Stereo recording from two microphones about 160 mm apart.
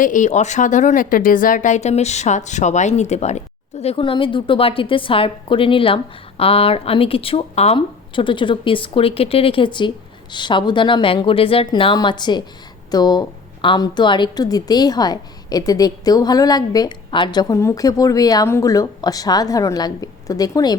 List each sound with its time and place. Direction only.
0.0 s a woman's voice: 50° left (ahead or behind); by 20.7 s 25° left (ahead or behind)